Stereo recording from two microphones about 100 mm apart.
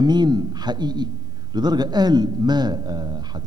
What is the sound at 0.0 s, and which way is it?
A man's voice, 45° right (ahead or behind).